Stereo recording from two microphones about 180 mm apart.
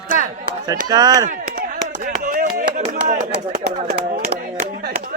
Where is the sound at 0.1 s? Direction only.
45° right (ahead or behind).